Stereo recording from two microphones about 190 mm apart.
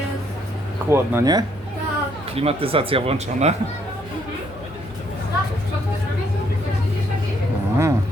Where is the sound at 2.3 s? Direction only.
30° right (ahead or behind).